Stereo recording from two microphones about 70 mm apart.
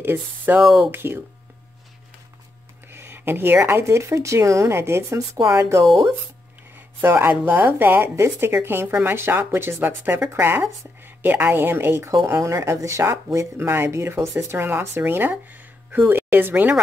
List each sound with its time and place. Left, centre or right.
0.0 s speech: right
2.9 s speech: right
7.0 s speech: right